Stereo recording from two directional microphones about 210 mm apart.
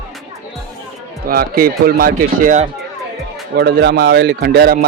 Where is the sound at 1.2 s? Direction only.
45° right (ahead or behind).